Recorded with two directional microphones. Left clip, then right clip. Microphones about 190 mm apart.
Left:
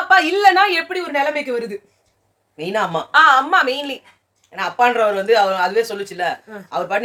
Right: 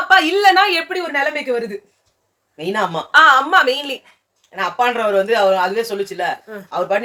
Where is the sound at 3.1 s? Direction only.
5° right (ahead or behind).